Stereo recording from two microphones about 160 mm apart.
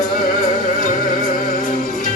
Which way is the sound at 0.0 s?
50° left (ahead or behind).